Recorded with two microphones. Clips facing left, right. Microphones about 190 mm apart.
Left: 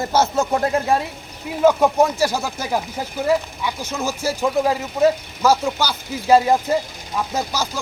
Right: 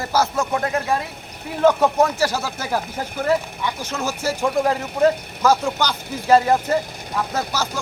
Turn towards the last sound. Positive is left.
turn(degrees=10)  # may be behind; listen again after turning